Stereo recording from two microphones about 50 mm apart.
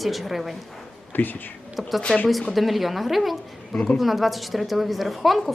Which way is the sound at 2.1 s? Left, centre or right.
Left.